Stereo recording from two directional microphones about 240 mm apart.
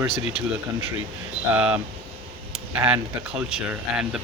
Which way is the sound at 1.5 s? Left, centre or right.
Centre.